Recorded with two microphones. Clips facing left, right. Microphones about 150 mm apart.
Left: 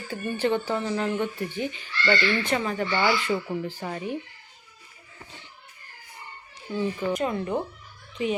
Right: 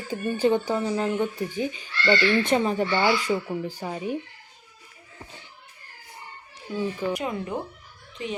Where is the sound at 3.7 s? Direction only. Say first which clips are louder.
Right 2 dB; 10° right (ahead or behind).